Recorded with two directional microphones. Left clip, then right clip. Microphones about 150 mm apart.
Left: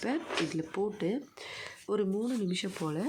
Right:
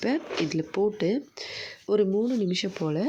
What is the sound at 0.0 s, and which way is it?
Speech, 25° right (ahead or behind).